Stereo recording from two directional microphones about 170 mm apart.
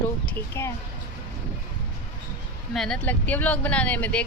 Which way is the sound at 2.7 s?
5° left (ahead or behind).